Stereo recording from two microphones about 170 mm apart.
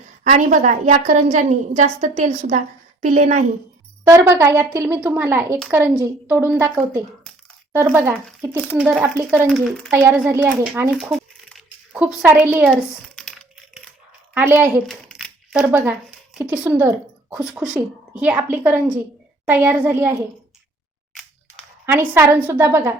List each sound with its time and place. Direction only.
0.3 s a woman's voice: 45° right (ahead or behind)
4.0 s a woman's voice: 15° right (ahead or behind)
8.7 s a woman's voice: 10° right (ahead or behind)
9.5 s speech: centre (ahead or behind)
9.9 s a woman's voice: 15° right (ahead or behind)
10.9 s a woman's voice: centre (ahead or behind)
12.7 s crumpling: 5° left (ahead or behind)
14.3 s a woman's voice: 10° right (ahead or behind)
21.8 s a woman's voice: 15° right (ahead or behind)